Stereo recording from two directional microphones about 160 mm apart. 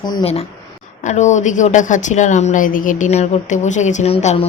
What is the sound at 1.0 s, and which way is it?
A woman's voice, 45° left (ahead or behind).